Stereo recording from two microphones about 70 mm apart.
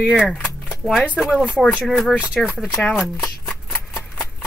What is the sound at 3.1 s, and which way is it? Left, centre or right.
Shuffling cards, centre.